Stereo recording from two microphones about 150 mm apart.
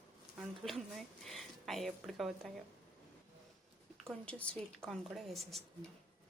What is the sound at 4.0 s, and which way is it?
Speech, 5° left (ahead or behind).